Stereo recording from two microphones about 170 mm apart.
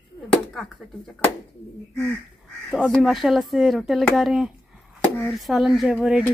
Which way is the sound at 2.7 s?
Centre (ahead or behind).